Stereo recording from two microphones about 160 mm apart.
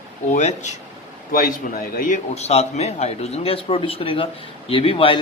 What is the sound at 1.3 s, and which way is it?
A man's voice, 70° left (ahead or behind).